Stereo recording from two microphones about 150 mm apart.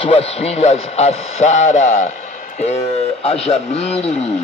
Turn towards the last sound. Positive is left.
turn(degrees=40)  # may be behind; listen again after turning